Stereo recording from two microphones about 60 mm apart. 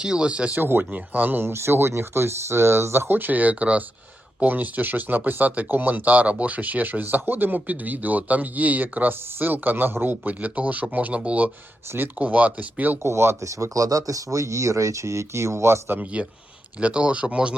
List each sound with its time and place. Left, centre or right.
0.0 s speech: centre
0.6 s speech: right
11.9 s speech: right
13.0 s speech: right
16.8 s speech: centre